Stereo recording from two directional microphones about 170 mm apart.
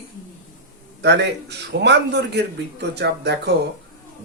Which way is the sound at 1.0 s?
85° right.